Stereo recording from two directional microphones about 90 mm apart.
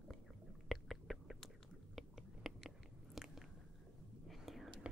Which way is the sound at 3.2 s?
Centre (ahead or behind).